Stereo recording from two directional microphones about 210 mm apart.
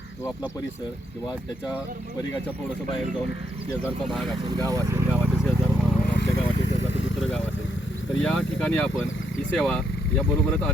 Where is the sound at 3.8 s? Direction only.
Centre (ahead or behind).